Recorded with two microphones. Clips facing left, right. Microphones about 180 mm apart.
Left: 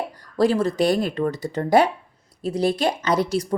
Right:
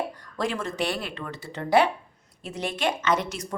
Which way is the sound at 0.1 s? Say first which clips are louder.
Left 10 dB; 35° left (ahead or behind).